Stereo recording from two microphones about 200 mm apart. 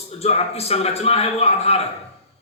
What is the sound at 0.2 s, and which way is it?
A man's voice, 30° left (ahead or behind).